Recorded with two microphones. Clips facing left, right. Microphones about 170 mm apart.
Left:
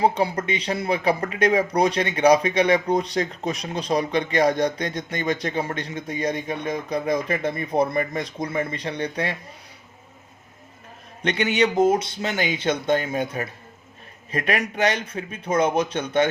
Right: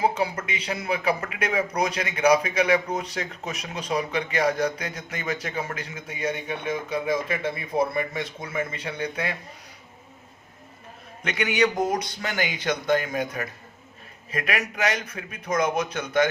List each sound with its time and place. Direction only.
0.0 s speech: 35° left (ahead or behind)
11.2 s speech: 30° left (ahead or behind)